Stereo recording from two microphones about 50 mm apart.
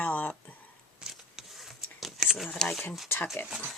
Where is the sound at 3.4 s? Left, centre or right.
Left.